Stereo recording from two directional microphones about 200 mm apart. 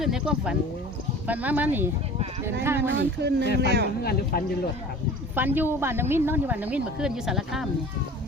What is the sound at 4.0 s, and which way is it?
Speech, 50° left (ahead or behind).